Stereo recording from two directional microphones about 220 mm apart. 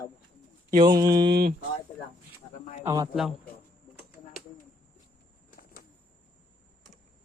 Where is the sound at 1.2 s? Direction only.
45° right (ahead or behind).